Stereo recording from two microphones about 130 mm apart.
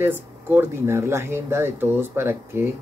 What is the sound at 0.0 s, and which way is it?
Speech, 15° right (ahead or behind).